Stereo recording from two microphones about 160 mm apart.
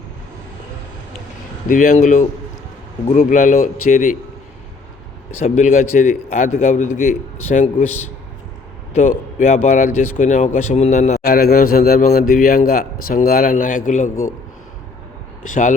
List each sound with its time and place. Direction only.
1.6 s a man's voice: 55° left (ahead or behind)
5.4 s a man's voice: 45° left (ahead or behind)
9.0 s a man's voice: 50° left (ahead or behind)
11.3 s a man's voice: 70° left (ahead or behind)
15.4 s a man's voice: 55° left (ahead or behind)